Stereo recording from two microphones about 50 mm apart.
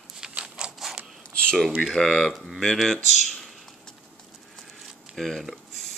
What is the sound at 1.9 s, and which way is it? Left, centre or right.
Speech, centre.